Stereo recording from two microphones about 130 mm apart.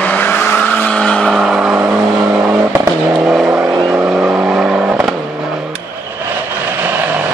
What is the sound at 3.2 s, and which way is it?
Vehicle, centre (ahead or behind).